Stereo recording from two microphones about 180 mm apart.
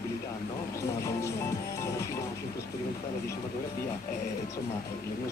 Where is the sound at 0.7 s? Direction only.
15° left (ahead or behind).